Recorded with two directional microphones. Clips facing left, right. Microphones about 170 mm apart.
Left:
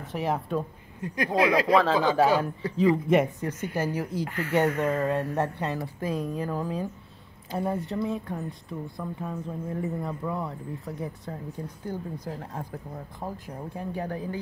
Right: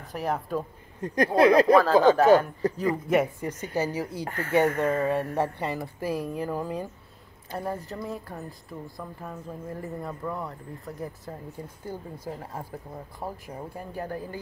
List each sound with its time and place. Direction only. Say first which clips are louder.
0.1 s a woman's voice: left 1 dB; centre (ahead or behind)
1.0 s speech: right 5 dB; 45° right (ahead or behind)
3.1 s speech: left 1 dB; 5° right (ahead or behind)
4.2 s speech: left 1 dB; 50° right (ahead or behind)
4.7 s speech: right 1 dB; 10° right (ahead or behind)
7.5 s a woman's voice: left 4 dB; centre (ahead or behind)